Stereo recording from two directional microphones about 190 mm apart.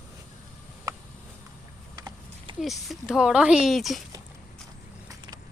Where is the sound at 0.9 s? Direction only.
20° right (ahead or behind).